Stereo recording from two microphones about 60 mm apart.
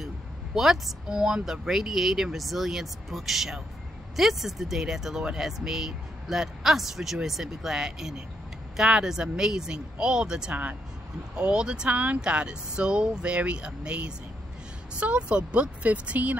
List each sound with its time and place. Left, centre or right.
0.6 s speech: centre
10.5 s speech: right
11.3 s speech: centre